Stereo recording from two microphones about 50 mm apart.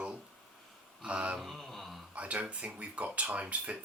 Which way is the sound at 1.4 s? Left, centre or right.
Centre.